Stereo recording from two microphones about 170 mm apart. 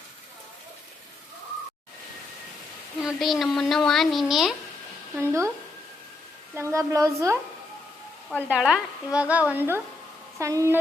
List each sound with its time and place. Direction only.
3.0 s a woman's voice: centre (ahead or behind)
5.1 s a woman's voice: 15° right (ahead or behind)
6.6 s a woman's voice: 15° right (ahead or behind)
8.4 s a woman's voice: 5° right (ahead or behind)